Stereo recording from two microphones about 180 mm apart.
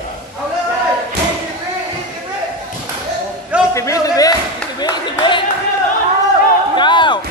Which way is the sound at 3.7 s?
15° left (ahead or behind).